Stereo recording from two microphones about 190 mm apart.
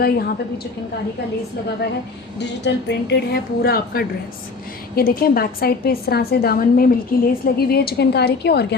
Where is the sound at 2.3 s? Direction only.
65° left (ahead or behind).